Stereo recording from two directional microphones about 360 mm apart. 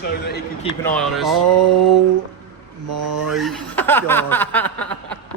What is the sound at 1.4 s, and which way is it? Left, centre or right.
Mantra, right.